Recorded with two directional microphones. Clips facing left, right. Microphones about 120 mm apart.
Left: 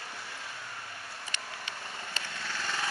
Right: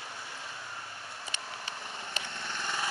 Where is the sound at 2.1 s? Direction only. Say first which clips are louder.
Even; 20° right (ahead or behind).